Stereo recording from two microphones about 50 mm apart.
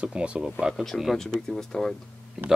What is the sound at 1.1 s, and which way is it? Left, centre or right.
Speech, centre.